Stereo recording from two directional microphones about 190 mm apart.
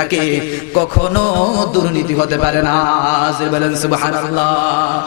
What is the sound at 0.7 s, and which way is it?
Music, 30° left (ahead or behind).